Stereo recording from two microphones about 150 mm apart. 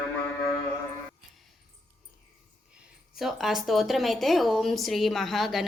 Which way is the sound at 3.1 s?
Centre (ahead or behind).